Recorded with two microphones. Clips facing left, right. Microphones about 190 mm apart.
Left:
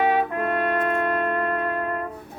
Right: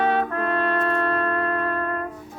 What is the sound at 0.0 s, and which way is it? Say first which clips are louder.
Trumpet: left 1 dB; 15° left (ahead or behind).